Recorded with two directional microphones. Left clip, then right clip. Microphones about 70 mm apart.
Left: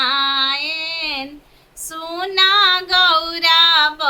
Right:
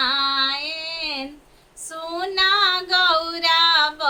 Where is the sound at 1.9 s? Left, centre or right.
Centre.